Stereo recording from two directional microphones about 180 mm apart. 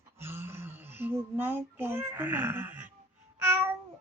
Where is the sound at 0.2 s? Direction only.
15° right (ahead or behind).